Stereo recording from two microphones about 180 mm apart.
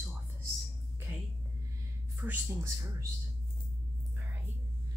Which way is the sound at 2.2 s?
10° right (ahead or behind).